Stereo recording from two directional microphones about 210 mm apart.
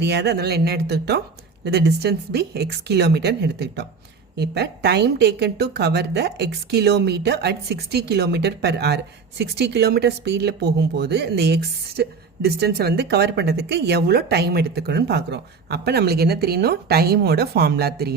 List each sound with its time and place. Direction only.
0.0 s speech: 55° right (ahead or behind)